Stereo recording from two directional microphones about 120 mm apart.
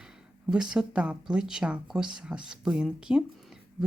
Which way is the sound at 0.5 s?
5° right (ahead or behind).